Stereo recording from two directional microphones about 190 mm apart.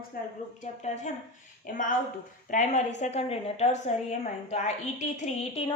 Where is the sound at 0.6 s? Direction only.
40° left (ahead or behind).